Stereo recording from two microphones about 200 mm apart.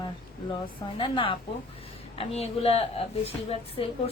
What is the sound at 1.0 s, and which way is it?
A woman's voice, 25° left (ahead or behind).